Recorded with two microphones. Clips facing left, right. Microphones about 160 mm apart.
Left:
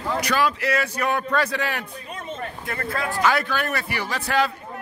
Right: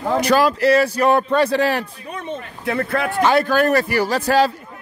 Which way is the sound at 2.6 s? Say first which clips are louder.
Right 9 dB; 70° right (ahead or behind).